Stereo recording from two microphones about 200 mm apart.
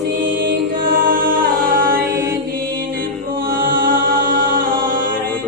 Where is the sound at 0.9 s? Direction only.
45° right (ahead or behind).